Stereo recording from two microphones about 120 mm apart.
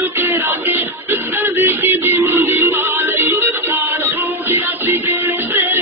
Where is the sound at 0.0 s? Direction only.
15° right (ahead or behind).